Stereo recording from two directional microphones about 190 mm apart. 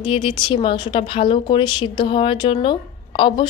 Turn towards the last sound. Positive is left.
turn(degrees=25)  # may be behind; listen again after turning